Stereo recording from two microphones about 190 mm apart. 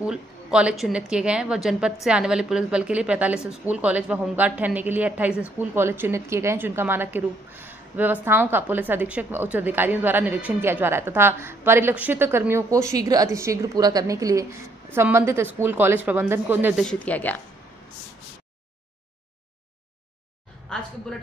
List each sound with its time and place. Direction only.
0.0 s a woman's voice: 5° right (ahead or behind)
16.8 s speech: 5° left (ahead or behind)
20.7 s a woman's voice: 5° left (ahead or behind)